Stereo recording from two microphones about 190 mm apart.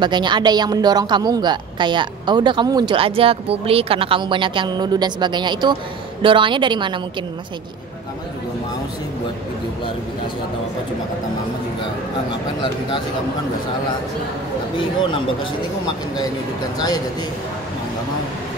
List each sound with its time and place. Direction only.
0.0 s a woman's voice: 25° right (ahead or behind)
14.8 s speech: 25° left (ahead or behind)
16.7 s speech: 20° left (ahead or behind)